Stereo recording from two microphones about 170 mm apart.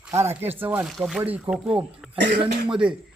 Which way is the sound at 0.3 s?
10° right (ahead or behind).